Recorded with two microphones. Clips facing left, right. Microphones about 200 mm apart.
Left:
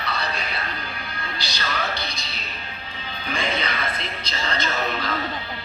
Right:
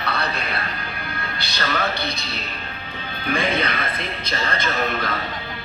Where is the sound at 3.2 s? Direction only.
55° right (ahead or behind).